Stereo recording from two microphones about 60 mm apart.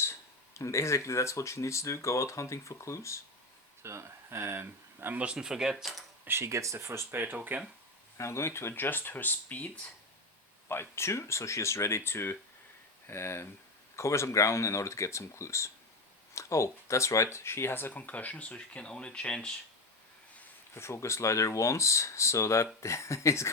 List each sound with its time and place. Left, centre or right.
0.0 s speech: left
3.8 s speech: right
5.1 s speech: centre
5.7 s speech: centre
6.2 s speech: right
6.5 s speech: right
7.1 s speech: right
8.2 s speech: left
10.7 s speech: left
17.3 s speech: left; by 19.5 s centre
20.7 s speech: left